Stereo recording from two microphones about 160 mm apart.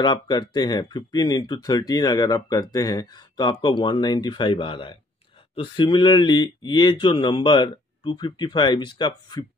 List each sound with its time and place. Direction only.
0.0 s speech: 25° left (ahead or behind)